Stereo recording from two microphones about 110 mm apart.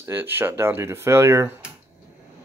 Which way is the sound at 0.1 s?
20° right (ahead or behind).